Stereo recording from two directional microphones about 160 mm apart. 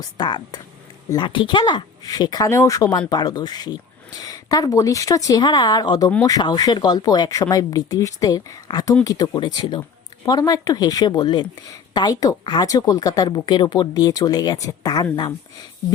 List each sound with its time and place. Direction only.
0.0 s speech: 25° left (ahead or behind)